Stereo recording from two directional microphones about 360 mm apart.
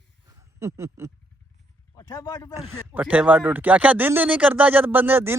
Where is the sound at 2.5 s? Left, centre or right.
Centre.